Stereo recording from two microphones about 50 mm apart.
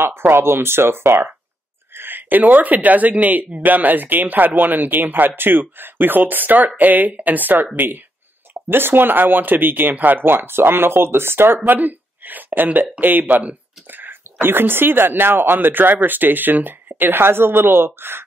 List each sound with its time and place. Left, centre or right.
0.0 s speech: right